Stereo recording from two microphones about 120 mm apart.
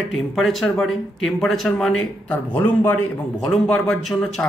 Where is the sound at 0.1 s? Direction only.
Centre (ahead or behind); by 3.1 s 15° left (ahead or behind).